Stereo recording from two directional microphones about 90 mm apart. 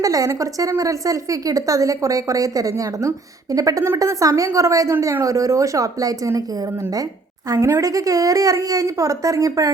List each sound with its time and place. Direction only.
0.0 s speech: 40° right (ahead or behind)